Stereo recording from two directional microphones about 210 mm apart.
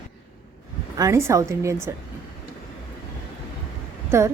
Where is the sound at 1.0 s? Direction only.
15° right (ahead or behind).